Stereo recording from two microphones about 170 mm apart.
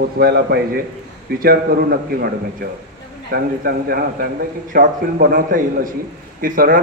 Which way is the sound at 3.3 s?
60° right (ahead or behind).